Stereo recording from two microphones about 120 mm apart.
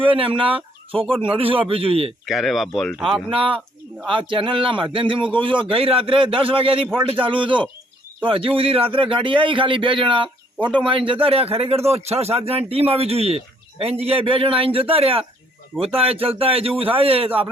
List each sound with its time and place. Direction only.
0.1 s speech: 50° right (ahead or behind)
2.2 s speech: centre (ahead or behind)
3.2 s speech: 45° right (ahead or behind)